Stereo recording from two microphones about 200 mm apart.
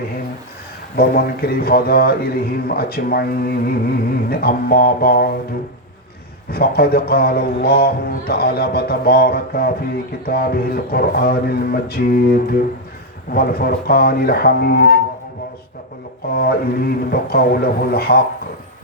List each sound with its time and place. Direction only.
0.9 s speech: 50° left (ahead or behind)
6.5 s speech: 50° left (ahead or behind)
16.3 s speech: 50° left (ahead or behind)